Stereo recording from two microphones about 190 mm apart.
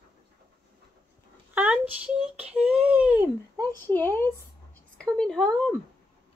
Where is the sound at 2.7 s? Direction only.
5° right (ahead or behind).